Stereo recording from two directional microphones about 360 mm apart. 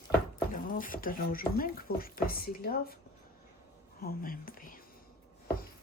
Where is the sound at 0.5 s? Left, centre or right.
Left.